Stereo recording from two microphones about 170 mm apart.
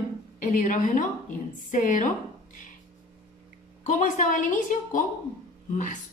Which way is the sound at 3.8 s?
45° left (ahead or behind).